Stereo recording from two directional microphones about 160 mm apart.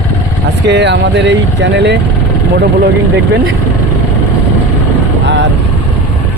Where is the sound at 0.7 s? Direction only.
90° right.